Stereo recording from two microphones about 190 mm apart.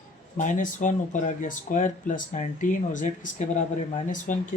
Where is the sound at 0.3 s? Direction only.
40° left (ahead or behind).